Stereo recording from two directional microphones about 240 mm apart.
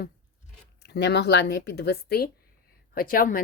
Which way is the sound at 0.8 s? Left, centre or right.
Left.